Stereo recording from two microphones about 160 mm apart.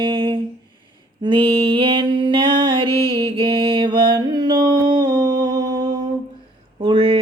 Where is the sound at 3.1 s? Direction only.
30° right (ahead or behind).